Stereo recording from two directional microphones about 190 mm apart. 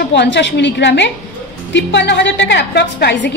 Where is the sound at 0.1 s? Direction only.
65° left (ahead or behind).